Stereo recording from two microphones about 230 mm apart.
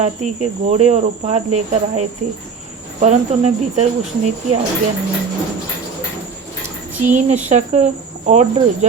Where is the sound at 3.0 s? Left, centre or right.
Right.